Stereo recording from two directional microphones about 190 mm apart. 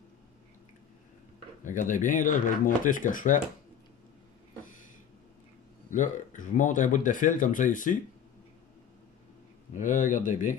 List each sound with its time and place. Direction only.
1.6 s speech: 40° left (ahead or behind)
5.9 s speech: 40° left (ahead or behind)
9.8 s speech: 40° left (ahead or behind)